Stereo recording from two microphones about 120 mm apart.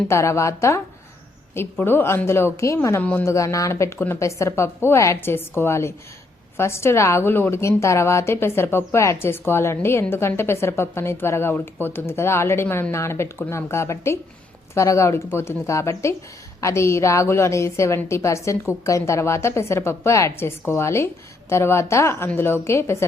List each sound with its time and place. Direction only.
0.1 s a woman's voice: 25° left (ahead or behind)
1.8 s a woman's voice: 20° left (ahead or behind)
3.3 s a woman's voice: 25° left (ahead or behind)